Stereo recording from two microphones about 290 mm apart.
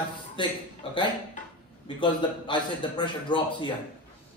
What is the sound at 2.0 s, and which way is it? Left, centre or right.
A man's voice, centre.